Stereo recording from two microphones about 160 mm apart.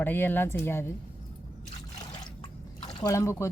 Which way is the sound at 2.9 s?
25° left (ahead or behind).